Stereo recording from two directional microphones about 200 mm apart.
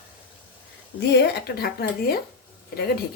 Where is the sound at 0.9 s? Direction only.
55° left (ahead or behind).